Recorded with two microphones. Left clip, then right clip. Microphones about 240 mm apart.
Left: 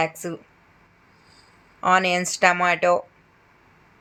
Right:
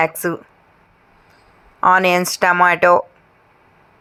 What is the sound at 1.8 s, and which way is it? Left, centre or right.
Speech, centre.